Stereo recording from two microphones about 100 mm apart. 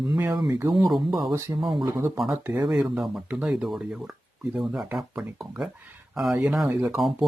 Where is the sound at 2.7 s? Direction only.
5° right (ahead or behind).